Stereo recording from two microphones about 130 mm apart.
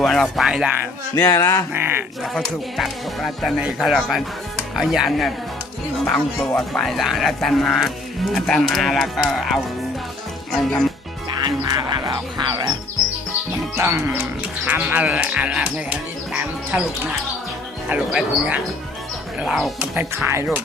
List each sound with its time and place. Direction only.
0.0 s speech: centre (ahead or behind)
1.2 s speech: 25° left (ahead or behind)
2.2 s speech: centre (ahead or behind)
6.1 s speech: 15° left (ahead or behind)
6.8 s speech: centre (ahead or behind)
11.4 s music: 35° right (ahead or behind)
13.7 s speech: 20° right (ahead or behind)
17.8 s speech: 5° right (ahead or behind)
19.8 s speech: 10° right (ahead or behind)